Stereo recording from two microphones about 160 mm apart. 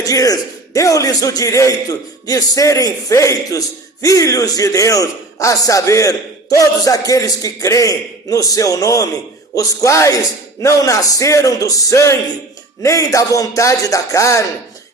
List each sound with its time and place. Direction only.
0.0 s a man's voice: 20° left (ahead or behind)